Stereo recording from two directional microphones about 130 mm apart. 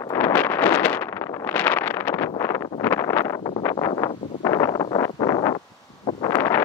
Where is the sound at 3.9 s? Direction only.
30° left (ahead or behind).